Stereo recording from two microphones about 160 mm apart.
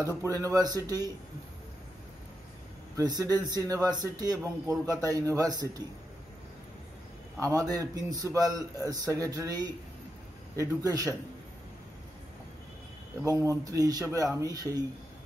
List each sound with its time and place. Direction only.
0.2 s a man's voice: 20° right (ahead or behind)
3.0 s a man's voice: 25° right (ahead or behind)
7.3 s a man's voice: 20° right (ahead or behind)
13.2 s a man's voice: 20° right (ahead or behind)